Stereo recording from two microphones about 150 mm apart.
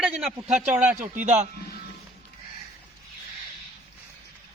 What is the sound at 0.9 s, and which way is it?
Speech, 55° right (ahead or behind).